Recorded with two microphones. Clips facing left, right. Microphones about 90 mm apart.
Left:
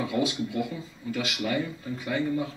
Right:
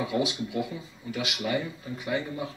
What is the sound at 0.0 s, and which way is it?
Speech, 20° right (ahead or behind).